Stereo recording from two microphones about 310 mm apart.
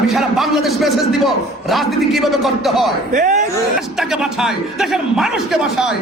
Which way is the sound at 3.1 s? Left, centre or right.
Right.